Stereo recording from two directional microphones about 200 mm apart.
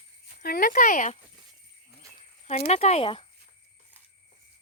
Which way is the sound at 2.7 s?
35° left (ahead or behind).